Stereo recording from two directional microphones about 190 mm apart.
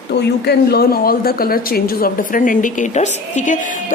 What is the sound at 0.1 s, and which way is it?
Speech, 55° left (ahead or behind).